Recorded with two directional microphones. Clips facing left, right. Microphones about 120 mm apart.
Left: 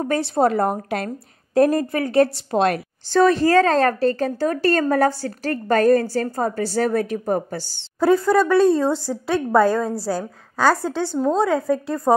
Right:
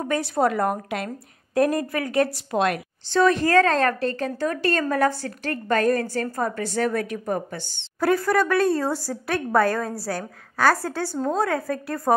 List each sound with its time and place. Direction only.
0.0 s a woman's voice: 30° left (ahead or behind)
8.0 s a woman's voice: 25° left (ahead or behind)